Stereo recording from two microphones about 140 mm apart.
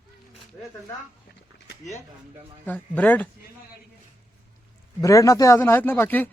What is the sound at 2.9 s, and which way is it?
Speech, 10° left (ahead or behind).